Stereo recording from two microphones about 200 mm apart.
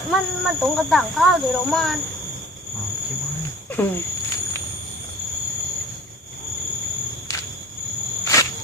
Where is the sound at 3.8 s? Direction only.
10° left (ahead or behind).